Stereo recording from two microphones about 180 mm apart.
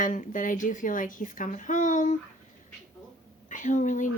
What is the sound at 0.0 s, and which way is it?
A woman's voice, 45° left (ahead or behind).